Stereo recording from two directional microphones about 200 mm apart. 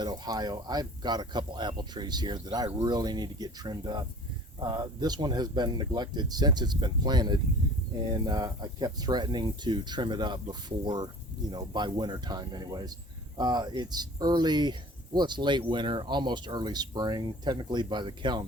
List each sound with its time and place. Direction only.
0.0 s speech: 20° right (ahead or behind)